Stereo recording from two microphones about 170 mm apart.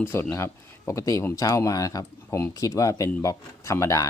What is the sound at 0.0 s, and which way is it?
Speech, 15° left (ahead or behind).